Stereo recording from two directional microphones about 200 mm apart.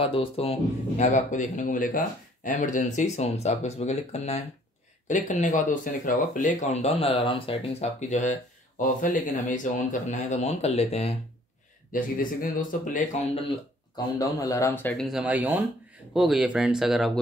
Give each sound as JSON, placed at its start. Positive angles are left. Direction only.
{"t": 0.0, "sound": "speech", "side_deg": 25}
{"t": 11.9, "sound": "speech", "side_deg": 45}
{"t": 13.9, "sound": "speech", "side_deg": 20}